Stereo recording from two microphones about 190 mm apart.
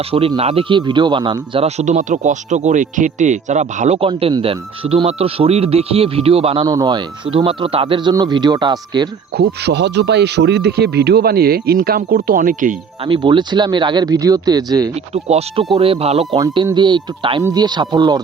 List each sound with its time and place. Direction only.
0.1 s speech: 30° right (ahead or behind)
1.6 s speech: 40° right (ahead or behind); by 9.0 s 25° right (ahead or behind)
9.4 s speech: 65° right (ahead or behind); by 12.7 s 45° right (ahead or behind)
13.1 s speech: 25° right (ahead or behind)
15.1 s speech: 35° right (ahead or behind)
16.4 s speech: 20° right (ahead or behind)